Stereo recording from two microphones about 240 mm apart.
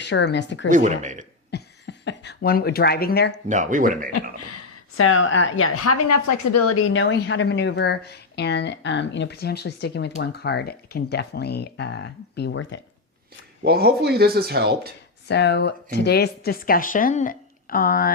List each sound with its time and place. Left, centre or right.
0.0 s a woman's voice: left
0.7 s speech: right
1.5 s speech: left
3.5 s speech: right
4.9 s a woman's voice: left
13.7 s speech: right
15.3 s a woman's voice: left